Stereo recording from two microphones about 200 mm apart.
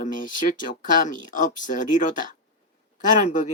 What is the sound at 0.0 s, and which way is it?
Speech, 40° left (ahead or behind).